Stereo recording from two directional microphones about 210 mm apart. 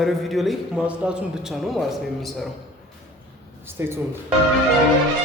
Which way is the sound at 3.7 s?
10° right (ahead or behind).